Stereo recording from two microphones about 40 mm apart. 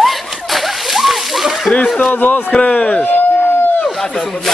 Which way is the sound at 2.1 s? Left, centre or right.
Left.